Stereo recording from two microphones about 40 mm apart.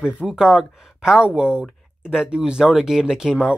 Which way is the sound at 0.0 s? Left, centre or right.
Right.